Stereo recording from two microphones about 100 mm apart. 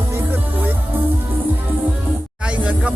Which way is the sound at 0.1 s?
20° right (ahead or behind).